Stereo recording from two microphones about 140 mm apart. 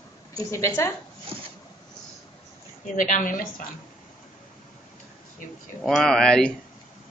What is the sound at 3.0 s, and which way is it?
Speech, 70° left (ahead or behind).